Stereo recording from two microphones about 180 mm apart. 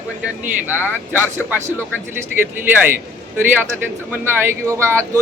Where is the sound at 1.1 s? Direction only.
10° right (ahead or behind).